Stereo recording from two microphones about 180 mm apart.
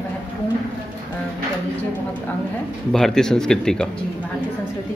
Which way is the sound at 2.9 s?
5° left (ahead or behind).